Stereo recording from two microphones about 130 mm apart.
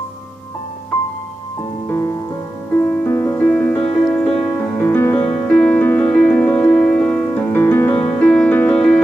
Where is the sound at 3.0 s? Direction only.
15° left (ahead or behind).